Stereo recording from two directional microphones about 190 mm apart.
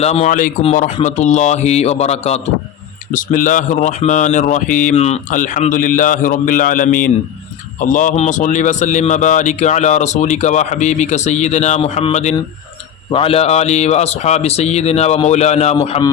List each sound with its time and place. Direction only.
0.0 s a man's voice: 35° left (ahead or behind)
3.1 s a man's voice: 45° left (ahead or behind)